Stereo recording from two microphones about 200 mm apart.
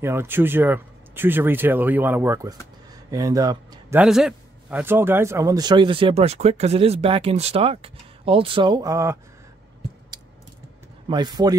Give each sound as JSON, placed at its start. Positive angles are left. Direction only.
{"t": 0.0, "sound": "speech", "side_deg": -10}
{"t": 4.0, "sound": "a man's voice", "side_deg": 0}
{"t": 11.1, "sound": "a man's voice", "side_deg": -20}